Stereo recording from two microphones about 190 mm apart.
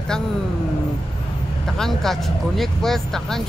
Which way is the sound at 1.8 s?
Centre (ahead or behind).